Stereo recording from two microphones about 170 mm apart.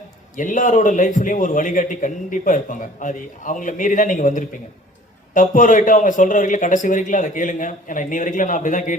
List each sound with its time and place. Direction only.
0.3 s a man's voice: 50° left (ahead or behind)